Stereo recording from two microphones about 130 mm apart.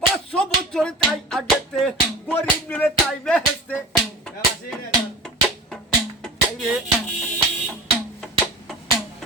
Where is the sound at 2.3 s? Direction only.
15° left (ahead or behind).